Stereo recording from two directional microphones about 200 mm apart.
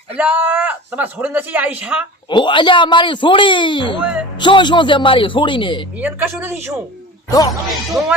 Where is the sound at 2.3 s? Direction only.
25° left (ahead or behind).